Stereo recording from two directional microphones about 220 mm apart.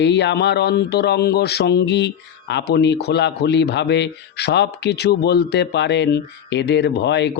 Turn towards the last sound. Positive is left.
turn(degrees=50)  # may be behind; listen again after turning